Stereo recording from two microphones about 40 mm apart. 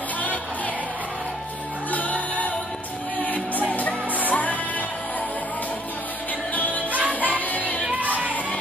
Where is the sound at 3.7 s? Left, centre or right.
Left.